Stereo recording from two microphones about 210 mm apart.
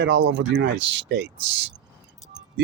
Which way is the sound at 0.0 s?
60° right (ahead or behind).